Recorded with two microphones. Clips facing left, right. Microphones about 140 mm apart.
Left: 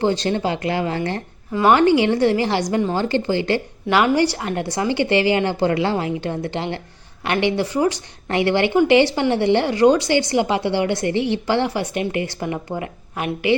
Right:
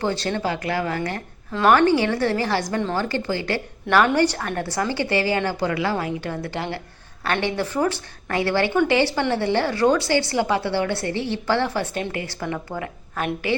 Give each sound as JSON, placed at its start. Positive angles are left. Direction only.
{"t": 0.0, "sound": "a woman's voice", "side_deg": 20}